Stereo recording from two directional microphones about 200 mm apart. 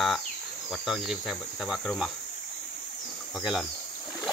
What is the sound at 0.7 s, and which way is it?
Insect, 5° right (ahead or behind).